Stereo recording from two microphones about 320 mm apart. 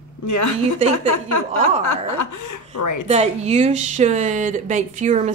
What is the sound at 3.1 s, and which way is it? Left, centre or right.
A woman's voice, centre.